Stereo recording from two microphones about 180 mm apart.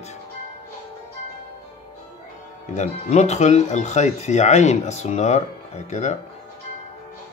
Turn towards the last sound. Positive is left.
turn(degrees=40)  # may be behind; listen again after turning